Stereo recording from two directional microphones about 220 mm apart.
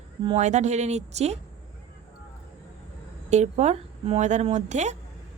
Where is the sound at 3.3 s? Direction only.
30° right (ahead or behind).